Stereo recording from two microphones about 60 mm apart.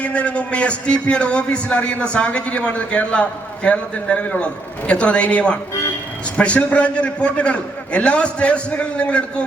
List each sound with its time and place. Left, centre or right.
0.0 s a man's voice: left